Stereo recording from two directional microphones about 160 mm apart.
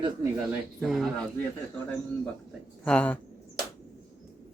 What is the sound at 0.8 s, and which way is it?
Speech, centre (ahead or behind).